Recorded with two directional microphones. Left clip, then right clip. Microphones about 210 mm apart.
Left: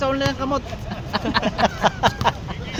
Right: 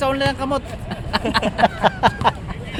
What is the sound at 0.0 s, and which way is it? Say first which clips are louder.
Speech: right 2 dB; 50° right (ahead or behind).